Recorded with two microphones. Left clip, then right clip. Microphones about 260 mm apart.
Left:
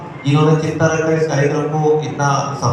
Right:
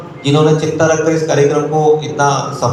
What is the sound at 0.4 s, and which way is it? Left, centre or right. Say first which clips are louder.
Speech: right 3 dB; right.